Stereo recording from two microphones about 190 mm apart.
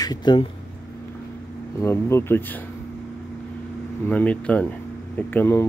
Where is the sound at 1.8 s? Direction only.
15° left (ahead or behind).